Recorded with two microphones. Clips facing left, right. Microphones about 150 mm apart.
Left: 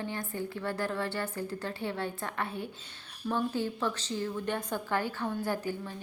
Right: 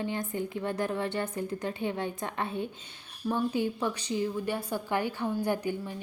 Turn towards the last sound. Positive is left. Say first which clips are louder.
# right 3 dB
turn(degrees=-15)  # may be behind; listen again after turning